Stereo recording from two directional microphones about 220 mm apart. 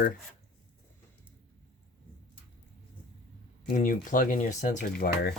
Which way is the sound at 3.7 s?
40° left (ahead or behind).